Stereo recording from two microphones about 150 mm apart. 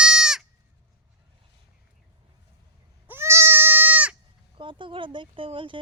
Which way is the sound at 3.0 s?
15° right (ahead or behind).